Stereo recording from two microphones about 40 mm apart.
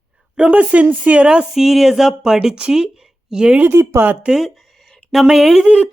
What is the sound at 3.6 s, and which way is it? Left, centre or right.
Speech, right.